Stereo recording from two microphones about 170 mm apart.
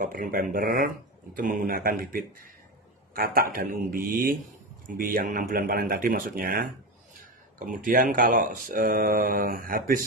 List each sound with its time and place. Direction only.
0.0 s speech: 55° right (ahead or behind)